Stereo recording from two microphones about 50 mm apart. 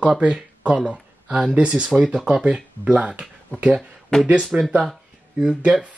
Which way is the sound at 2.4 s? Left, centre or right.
Right.